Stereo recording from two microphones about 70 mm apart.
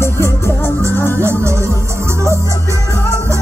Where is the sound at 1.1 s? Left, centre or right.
Right.